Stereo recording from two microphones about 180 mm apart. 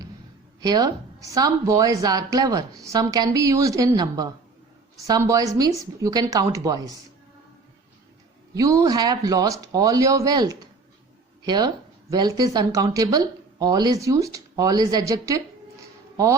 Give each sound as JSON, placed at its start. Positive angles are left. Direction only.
{"t": 0.6, "sound": "speech", "side_deg": -20}
{"t": 8.5, "sound": "speech", "side_deg": -20}